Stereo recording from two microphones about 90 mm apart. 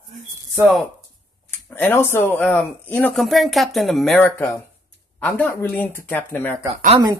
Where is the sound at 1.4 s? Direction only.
25° left (ahead or behind).